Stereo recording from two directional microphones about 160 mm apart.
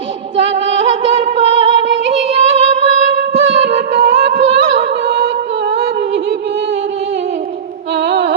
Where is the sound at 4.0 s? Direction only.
90° right.